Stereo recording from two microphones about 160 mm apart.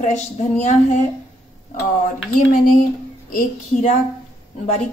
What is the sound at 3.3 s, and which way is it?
Speech, 50° left (ahead or behind).